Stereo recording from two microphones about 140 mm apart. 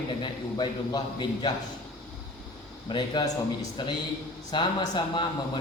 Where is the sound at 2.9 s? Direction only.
35° left (ahead or behind).